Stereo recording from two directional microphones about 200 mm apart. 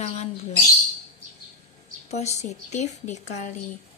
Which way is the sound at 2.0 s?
35° left (ahead or behind).